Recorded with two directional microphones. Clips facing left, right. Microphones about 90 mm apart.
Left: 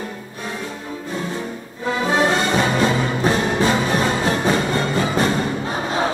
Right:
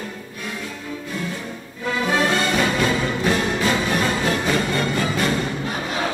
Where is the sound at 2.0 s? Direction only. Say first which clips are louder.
Left 2 dB; 25° left (ahead or behind).